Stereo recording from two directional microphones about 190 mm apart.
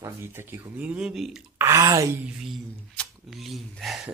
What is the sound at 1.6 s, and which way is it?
Speech, 15° right (ahead or behind).